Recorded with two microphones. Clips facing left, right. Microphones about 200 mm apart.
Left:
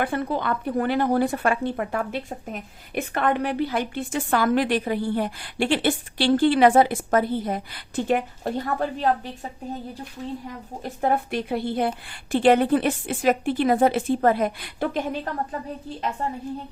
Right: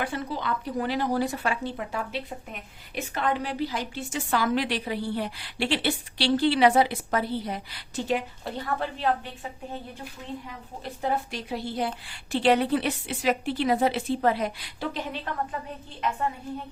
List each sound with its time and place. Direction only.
0.0 s speech: 55° left (ahead or behind)
10.8 s a woman's voice: 55° left (ahead or behind)
16.2 s a woman's voice: 35° left (ahead or behind)